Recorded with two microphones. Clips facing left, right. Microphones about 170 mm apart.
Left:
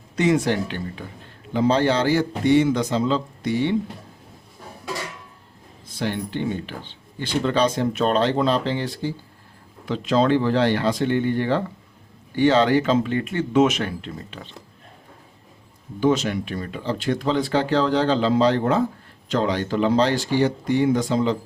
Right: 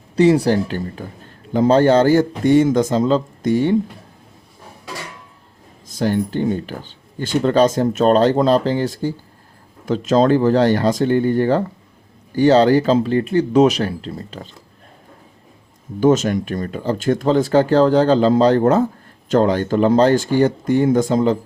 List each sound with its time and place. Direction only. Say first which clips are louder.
0.2 s speech: right 6 dB; 35° right (ahead or behind)
5.8 s speech: right 7 dB; 40° right (ahead or behind)
16.0 s speech: right 5 dB; 45° right (ahead or behind)